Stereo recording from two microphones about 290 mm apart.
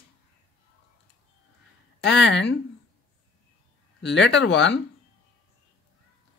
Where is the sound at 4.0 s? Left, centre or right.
Left.